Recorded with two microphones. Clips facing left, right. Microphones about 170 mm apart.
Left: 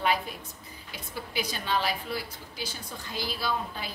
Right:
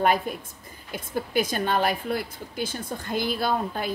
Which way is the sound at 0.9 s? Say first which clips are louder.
Right 9 dB; 50° right (ahead or behind).